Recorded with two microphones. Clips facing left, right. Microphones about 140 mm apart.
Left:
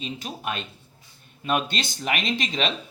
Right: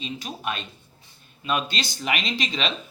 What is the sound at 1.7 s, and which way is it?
Speech, 50° left (ahead or behind).